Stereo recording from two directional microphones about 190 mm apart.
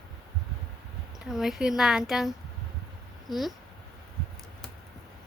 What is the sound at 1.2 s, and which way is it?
A woman's voice, centre (ahead or behind).